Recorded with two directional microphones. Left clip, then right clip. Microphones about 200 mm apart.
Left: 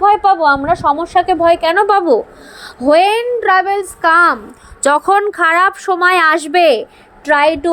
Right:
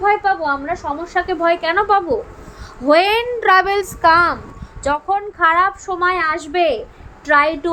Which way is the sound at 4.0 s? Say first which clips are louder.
Left 3 dB; 15° left (ahead or behind).